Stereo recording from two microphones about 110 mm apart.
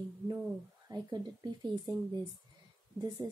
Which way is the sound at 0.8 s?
35° right (ahead or behind).